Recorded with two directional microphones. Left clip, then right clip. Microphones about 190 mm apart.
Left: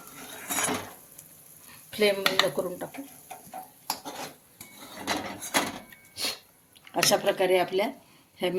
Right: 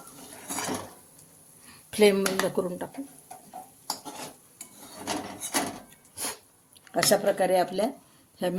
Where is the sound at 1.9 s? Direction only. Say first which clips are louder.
Right 3 dB; 55° right (ahead or behind).